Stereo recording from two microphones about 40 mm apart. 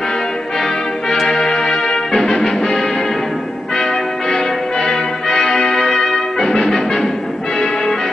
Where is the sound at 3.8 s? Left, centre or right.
Centre.